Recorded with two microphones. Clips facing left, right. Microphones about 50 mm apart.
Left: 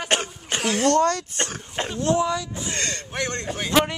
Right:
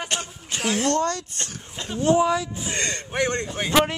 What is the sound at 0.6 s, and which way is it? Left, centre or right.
Speech, centre.